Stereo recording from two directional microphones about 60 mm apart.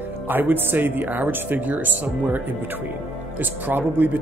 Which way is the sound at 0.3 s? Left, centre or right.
Right.